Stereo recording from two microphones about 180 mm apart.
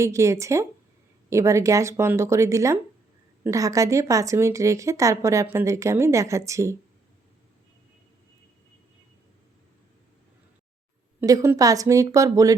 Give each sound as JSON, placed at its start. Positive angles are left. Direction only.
{"t": 0.0, "sound": "speech", "side_deg": -15}
{"t": 11.2, "sound": "a woman's voice", "side_deg": -15}